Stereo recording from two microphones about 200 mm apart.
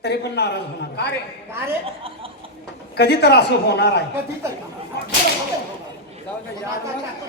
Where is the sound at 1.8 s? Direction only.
25° right (ahead or behind).